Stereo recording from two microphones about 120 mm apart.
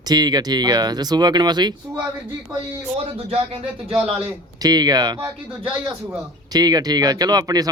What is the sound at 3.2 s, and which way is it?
Speech, 55° right (ahead or behind).